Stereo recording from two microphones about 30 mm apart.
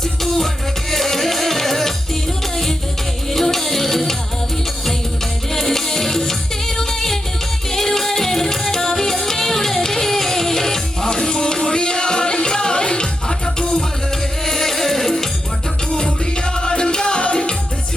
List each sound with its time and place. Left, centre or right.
0.2 s music: centre
3.3 s music: centre
5.5 s music: centre
14.4 s music: centre
15.9 s music: left